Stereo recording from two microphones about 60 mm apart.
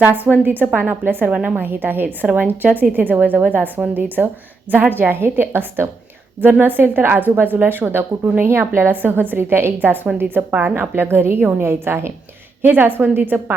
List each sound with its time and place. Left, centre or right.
0.0 s a woman's voice: right
1.3 s a woman's voice: centre
1.5 s a woman's voice: right